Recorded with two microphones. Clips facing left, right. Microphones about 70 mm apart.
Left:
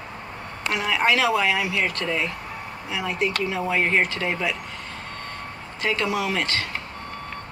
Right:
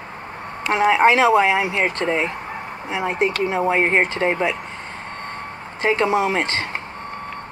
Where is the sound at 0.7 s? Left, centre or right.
Right.